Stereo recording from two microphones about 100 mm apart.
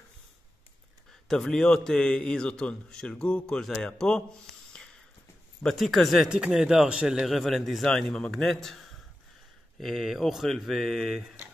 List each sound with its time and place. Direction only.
1.3 s a man's voice: 5° left (ahead or behind)
5.6 s speech: 5° left (ahead or behind)